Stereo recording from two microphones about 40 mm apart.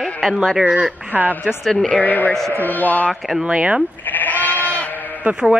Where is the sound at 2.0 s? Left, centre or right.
Left.